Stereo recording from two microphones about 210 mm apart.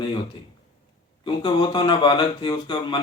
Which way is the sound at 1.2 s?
20° left (ahead or behind).